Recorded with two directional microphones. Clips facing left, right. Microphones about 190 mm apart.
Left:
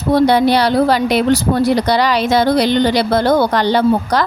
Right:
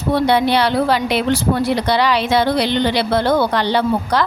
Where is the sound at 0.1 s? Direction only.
40° left (ahead or behind).